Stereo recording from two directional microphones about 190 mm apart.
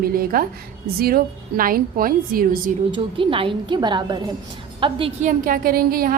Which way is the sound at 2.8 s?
25° right (ahead or behind).